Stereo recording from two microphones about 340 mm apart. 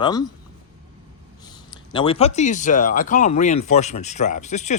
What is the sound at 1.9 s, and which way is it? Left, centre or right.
Speech, centre.